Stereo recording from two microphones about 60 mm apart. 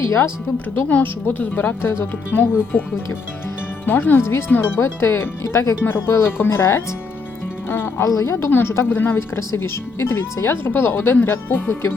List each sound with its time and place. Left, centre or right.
0.0 s speech: left
1.0 s speech: left
4.2 s speech: left
8.0 s a woman's voice: left
8.4 s speech: left